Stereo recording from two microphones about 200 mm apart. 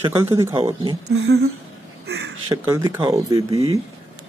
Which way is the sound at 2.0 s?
65° right (ahead or behind).